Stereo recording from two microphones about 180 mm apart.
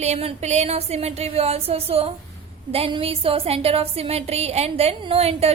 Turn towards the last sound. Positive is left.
turn(degrees=-35)  # may be behind; listen again after turning